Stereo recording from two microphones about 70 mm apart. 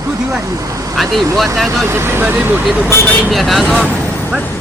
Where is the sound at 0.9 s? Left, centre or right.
Centre.